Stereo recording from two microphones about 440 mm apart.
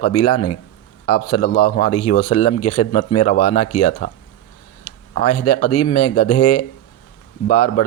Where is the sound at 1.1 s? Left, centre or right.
Left.